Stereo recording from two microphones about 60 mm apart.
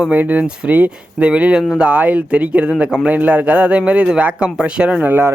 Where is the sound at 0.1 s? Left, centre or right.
Right.